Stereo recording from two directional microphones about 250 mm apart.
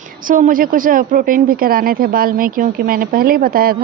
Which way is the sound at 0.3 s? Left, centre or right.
Right.